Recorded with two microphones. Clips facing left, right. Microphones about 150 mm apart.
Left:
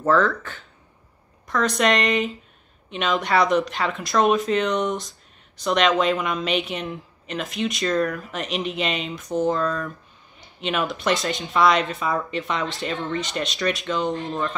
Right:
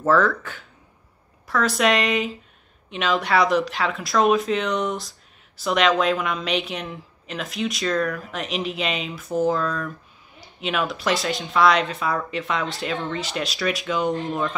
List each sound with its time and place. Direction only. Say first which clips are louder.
0.0 s a woman's voice: even; 5° right (ahead or behind)
14.1 s speech: right 1 dB; 20° right (ahead or behind)